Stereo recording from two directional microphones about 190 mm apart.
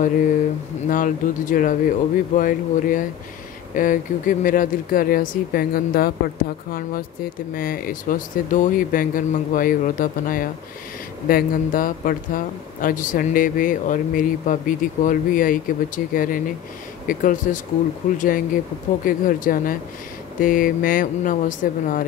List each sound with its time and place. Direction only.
0.8 s speech: 45° left (ahead or behind)